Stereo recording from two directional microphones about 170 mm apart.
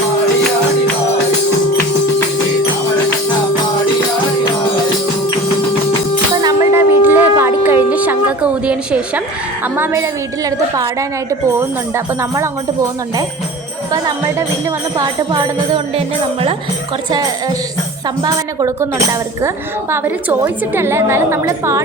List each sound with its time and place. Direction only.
6.4 s a sound: 15° right (ahead or behind)
9.7 s a woman's voice: 15° right (ahead or behind)
11.9 s a woman's voice: 15° right (ahead or behind)
14.9 s jingle bell: 30° right (ahead or behind)
18.2 s a woman's voice: 20° right (ahead or behind)
19.9 s a woman's voice: 10° right (ahead or behind)